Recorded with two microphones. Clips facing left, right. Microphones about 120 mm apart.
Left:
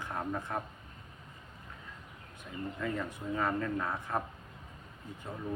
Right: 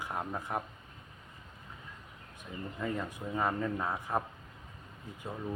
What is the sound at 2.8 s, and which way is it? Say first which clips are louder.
Speech: right 1 dB; 15° right (ahead or behind).